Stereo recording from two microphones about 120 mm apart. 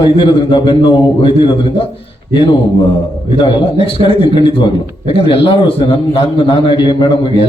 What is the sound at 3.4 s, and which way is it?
A man's voice, 45° left (ahead or behind).